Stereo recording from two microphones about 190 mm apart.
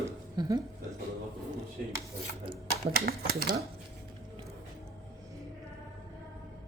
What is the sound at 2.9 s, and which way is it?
Speech, 55° right (ahead or behind).